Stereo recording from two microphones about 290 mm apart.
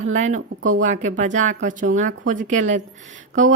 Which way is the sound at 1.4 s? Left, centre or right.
Right.